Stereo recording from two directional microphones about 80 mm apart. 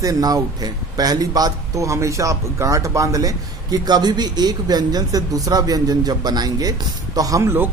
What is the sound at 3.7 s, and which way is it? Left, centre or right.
Speech, right.